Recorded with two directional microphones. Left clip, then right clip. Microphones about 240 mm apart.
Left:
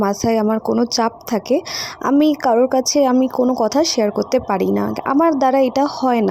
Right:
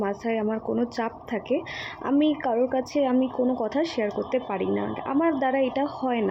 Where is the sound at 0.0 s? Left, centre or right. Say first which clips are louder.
Left 10 dB; left.